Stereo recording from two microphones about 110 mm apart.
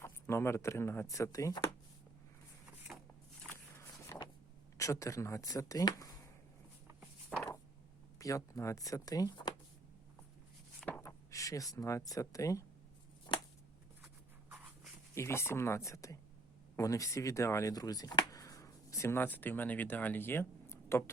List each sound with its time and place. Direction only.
0.0 s speech: 25° left (ahead or behind)
3.8 s a sound: 25° left (ahead or behind)
4.8 s speech: 30° left (ahead or behind)
7.3 s a sound: 5° left (ahead or behind)
8.2 s speech: 30° left (ahead or behind)
10.8 s speech: 20° left (ahead or behind)
13.3 s shuffling cards: 45° left (ahead or behind)
15.1 s speech: 25° left (ahead or behind)